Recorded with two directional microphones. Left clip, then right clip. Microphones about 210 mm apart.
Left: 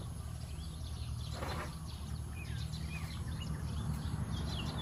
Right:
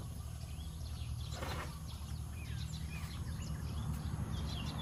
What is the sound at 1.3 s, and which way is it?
Wild animals, 30° right (ahead or behind).